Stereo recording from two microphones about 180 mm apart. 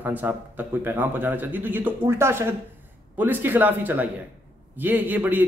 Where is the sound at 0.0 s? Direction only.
10° right (ahead or behind).